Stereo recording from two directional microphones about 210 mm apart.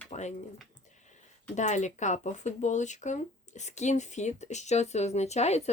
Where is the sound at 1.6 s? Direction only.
35° left (ahead or behind).